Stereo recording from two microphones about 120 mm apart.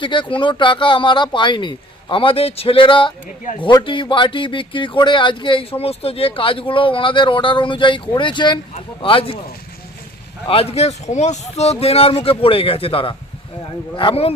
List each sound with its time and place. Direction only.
0.0 s speech: 45° left (ahead or behind)
5.8 s speech: 55° left (ahead or behind)
10.4 s speech: 50° left (ahead or behind)